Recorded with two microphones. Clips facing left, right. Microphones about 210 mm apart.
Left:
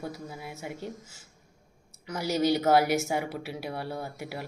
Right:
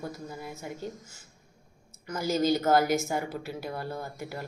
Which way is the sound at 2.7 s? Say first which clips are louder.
Left 1 dB; 70° left (ahead or behind).